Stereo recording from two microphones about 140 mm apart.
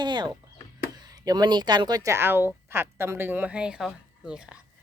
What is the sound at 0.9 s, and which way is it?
Speech, 30° right (ahead or behind).